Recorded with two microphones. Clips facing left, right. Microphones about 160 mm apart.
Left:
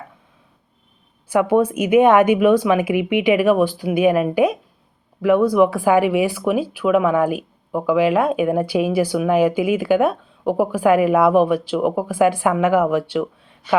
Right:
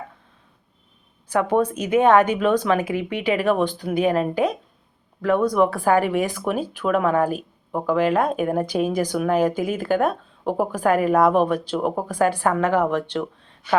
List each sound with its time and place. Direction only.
1.3 s speech: 10° left (ahead or behind)